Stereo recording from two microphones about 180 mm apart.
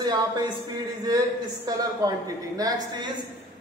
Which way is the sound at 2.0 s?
20° right (ahead or behind).